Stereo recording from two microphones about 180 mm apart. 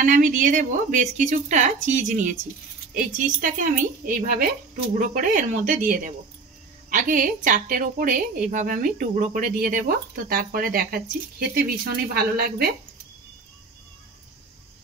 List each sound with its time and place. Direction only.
0.0 s a woman's voice: 50° right (ahead or behind)